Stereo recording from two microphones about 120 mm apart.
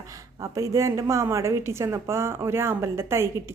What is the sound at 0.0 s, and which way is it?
A woman's voice, 25° right (ahead or behind).